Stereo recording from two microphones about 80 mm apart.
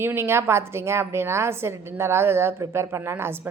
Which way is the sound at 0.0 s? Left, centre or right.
Right.